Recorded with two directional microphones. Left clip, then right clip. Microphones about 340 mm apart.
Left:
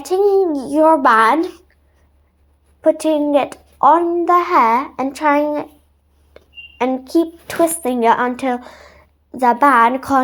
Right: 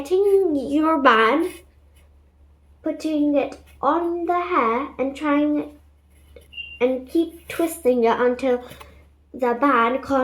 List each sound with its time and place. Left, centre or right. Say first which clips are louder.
0.0 s a child's voice: left 4 dB; left
2.8 s a child's voice: left 8 dB; left
7.4 s a child's voice: left 4 dB; left